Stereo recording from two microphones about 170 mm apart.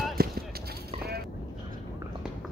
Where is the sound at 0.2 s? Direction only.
65° right (ahead or behind).